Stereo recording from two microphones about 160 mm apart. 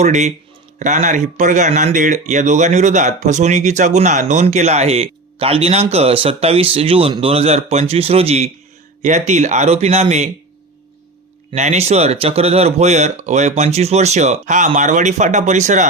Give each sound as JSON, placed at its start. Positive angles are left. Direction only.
{"t": 0.0, "sound": "speech", "side_deg": -45}
{"t": 11.5, "sound": "speech", "side_deg": -45}